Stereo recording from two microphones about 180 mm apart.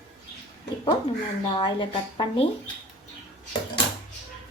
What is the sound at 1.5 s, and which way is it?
Speech, 25° left (ahead or behind).